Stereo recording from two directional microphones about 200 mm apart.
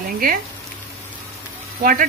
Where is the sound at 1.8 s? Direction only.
45° right (ahead or behind).